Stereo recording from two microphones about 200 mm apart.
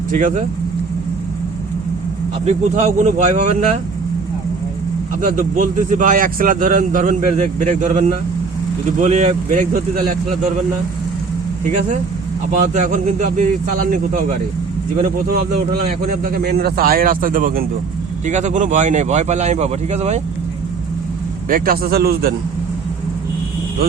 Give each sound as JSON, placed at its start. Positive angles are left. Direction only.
{"t": 0.1, "sound": "speech", "side_deg": -40}
{"t": 2.4, "sound": "speech", "side_deg": -35}
{"t": 5.2, "sound": "a man's voice", "side_deg": -45}
{"t": 12.5, "sound": "speech", "side_deg": -40}
{"t": 15.0, "sound": "a man's voice", "side_deg": -50}
{"t": 21.5, "sound": "a man's voice", "side_deg": -45}